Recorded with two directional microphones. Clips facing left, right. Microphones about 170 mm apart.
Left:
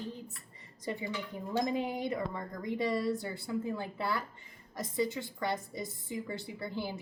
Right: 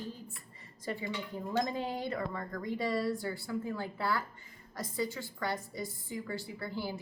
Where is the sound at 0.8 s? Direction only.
20° left (ahead or behind).